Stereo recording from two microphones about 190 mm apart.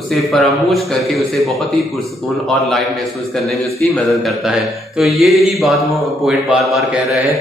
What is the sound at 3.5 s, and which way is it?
A man's voice, centre (ahead or behind).